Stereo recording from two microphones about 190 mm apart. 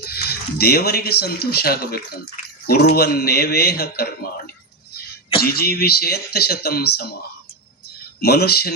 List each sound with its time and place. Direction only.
0.0 s a man's voice: 55° left (ahead or behind)
5.4 s speech: 55° left (ahead or behind)
8.2 s speech: 55° left (ahead or behind)